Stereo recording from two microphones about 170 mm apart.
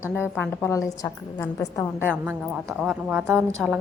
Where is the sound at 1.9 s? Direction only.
10° right (ahead or behind).